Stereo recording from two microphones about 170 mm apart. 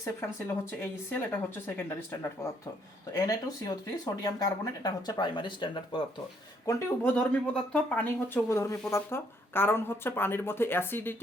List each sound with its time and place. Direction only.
0.0 s speech: 15° left (ahead or behind)
7.7 s speech: 5° left (ahead or behind)